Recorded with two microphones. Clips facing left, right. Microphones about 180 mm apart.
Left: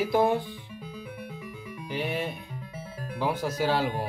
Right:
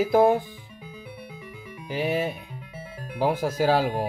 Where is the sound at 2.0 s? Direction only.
10° right (ahead or behind).